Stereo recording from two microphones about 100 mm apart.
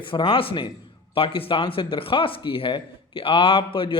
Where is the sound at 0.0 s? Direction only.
60° left (ahead or behind).